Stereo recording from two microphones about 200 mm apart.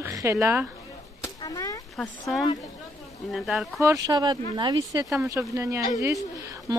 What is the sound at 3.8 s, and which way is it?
A woman's voice, 15° right (ahead or behind).